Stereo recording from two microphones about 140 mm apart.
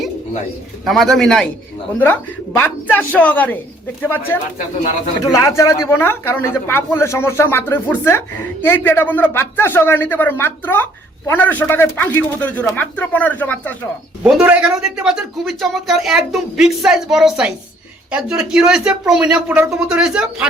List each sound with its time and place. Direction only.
0.9 s a man's voice: centre (ahead or behind)
14.3 s a man's voice: 5° right (ahead or behind)